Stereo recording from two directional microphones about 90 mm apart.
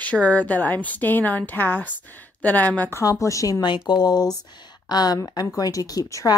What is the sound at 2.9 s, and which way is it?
Speech, 35° left (ahead or behind).